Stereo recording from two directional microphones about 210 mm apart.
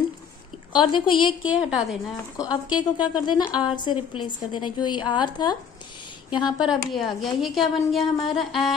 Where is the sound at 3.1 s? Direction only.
20° left (ahead or behind).